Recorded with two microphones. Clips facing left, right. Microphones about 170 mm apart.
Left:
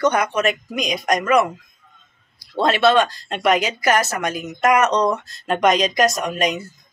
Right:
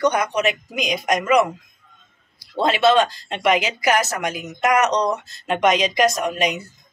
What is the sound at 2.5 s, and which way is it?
Speech, 15° right (ahead or behind).